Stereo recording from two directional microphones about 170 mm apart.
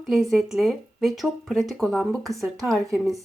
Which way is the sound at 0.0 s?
Centre (ahead or behind).